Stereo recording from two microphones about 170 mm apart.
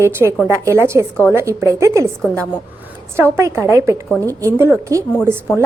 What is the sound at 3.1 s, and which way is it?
A woman's voice, 15° right (ahead or behind).